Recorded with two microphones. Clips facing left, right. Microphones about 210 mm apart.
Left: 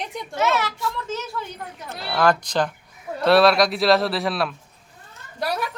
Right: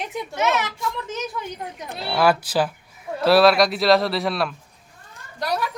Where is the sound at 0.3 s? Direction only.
20° right (ahead or behind); by 4.5 s centre (ahead or behind).